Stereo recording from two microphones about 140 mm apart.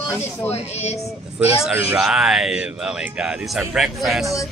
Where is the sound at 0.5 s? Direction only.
50° left (ahead or behind).